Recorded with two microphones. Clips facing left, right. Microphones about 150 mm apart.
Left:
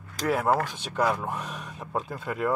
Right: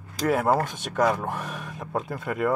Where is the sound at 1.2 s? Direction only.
60° right (ahead or behind).